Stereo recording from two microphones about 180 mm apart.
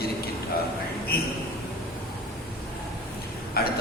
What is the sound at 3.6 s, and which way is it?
Speech, 60° left (ahead or behind).